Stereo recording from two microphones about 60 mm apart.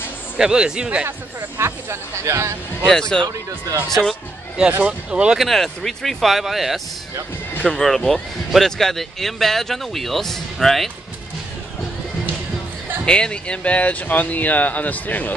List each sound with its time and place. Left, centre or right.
0.4 s speech: centre
1.6 s speech: right
2.9 s speech: centre
3.3 s speech: right
4.6 s speech: right
5.4 s speech: centre
13.0 s speech: centre